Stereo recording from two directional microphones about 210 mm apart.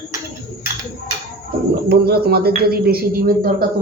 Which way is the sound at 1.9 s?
50° right (ahead or behind).